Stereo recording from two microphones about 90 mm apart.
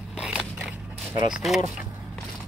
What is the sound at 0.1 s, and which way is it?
Biting, 10° right (ahead or behind).